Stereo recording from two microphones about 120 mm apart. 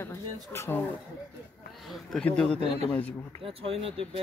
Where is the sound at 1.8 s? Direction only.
Centre (ahead or behind).